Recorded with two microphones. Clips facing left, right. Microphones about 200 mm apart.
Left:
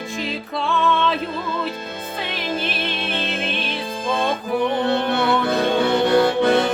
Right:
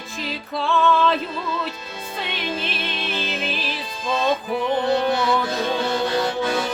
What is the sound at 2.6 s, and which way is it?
Music, centre (ahead or behind).